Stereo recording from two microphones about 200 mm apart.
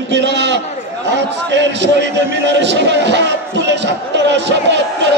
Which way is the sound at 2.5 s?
60° right (ahead or behind).